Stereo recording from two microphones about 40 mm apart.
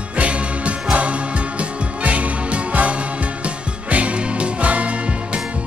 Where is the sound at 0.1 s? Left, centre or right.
Right.